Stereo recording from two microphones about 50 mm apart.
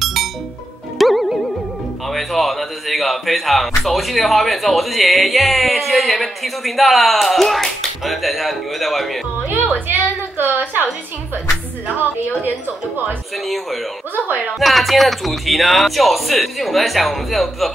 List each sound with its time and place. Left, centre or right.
0.0 s music: centre
2.0 s a man's voice: centre
10.3 s a woman's voice: right
12.0 s a woman's voice: right
14.6 s a man's voice: centre